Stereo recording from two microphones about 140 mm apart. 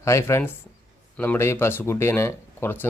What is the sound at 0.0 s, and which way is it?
Speech, 20° left (ahead or behind).